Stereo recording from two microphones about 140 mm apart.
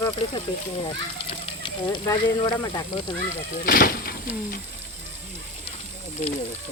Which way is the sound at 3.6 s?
90° left.